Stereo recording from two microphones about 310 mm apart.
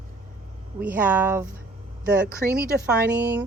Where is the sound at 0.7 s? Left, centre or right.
Centre.